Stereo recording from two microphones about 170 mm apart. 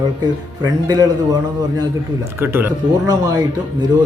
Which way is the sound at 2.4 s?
10° right (ahead or behind).